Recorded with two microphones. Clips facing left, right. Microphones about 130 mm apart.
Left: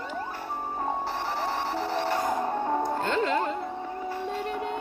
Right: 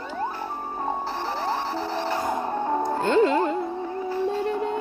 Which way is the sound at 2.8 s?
25° right (ahead or behind).